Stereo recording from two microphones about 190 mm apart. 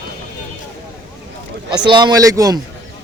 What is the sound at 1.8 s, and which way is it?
Speech, 25° right (ahead or behind).